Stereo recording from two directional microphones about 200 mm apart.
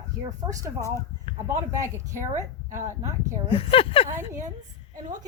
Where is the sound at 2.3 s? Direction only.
40° right (ahead or behind).